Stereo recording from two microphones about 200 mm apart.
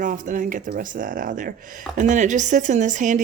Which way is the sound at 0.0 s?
40° right (ahead or behind).